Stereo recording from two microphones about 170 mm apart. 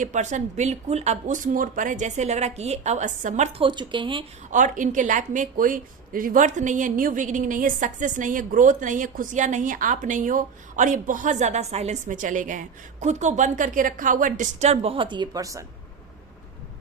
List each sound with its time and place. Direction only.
0.0 s speech: 45° right (ahead or behind)
3.6 s speech: 30° right (ahead or behind)
4.5 s speech: 50° right (ahead or behind); by 15.6 s 20° right (ahead or behind)